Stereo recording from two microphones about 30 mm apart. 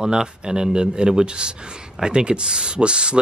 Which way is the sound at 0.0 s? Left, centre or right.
Right.